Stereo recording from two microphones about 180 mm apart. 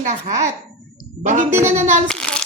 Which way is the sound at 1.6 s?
40° right (ahead or behind).